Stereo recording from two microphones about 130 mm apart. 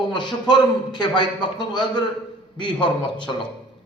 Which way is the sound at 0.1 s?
35° left (ahead or behind).